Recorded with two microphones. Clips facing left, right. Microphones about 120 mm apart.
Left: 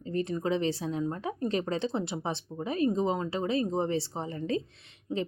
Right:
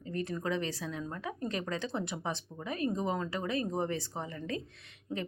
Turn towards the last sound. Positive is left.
turn(degrees=25)  # may be behind; listen again after turning